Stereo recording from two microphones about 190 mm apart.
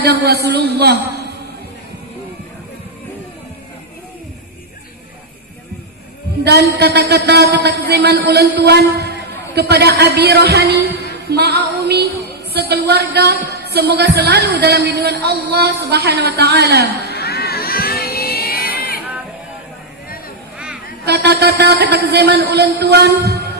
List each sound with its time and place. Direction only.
0.0 s speech: 55° right (ahead or behind)
6.4 s speech: 60° right (ahead or behind)
11.1 s music: 55° right (ahead or behind)
12.5 s speech: 60° right (ahead or behind)
17.1 s a sound: 55° left (ahead or behind)
21.0 s speech: 60° right (ahead or behind)